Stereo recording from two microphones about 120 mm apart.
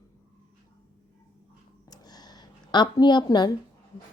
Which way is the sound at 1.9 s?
35° left (ahead or behind).